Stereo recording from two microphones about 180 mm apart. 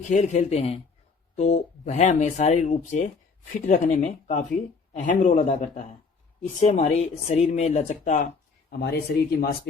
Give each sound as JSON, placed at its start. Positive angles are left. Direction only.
{"t": 0.1, "sound": "speech", "side_deg": 40}
{"t": 8.8, "sound": "speech", "side_deg": 60}